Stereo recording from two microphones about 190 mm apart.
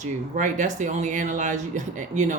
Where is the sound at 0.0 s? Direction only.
40° right (ahead or behind).